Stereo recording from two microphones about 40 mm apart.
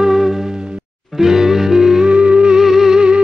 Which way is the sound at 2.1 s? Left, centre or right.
Right.